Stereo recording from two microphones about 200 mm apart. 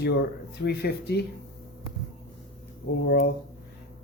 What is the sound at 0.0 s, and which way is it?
Speech, 55° left (ahead or behind).